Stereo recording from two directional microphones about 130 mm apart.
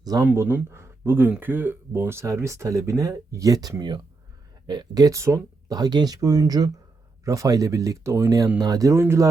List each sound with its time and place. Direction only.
0.0 s speech: 30° right (ahead or behind)
0.3 s speech: 15° right (ahead or behind)